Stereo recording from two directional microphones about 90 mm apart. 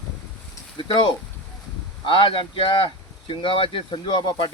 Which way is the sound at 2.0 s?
75° left (ahead or behind).